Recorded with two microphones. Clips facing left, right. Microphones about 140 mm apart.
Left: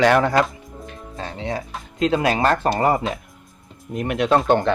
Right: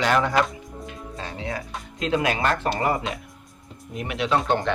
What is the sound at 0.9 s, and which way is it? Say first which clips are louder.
Music: left 4 dB; 30° left (ahead or behind).